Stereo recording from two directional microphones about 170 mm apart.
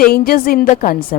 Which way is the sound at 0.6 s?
40° left (ahead or behind).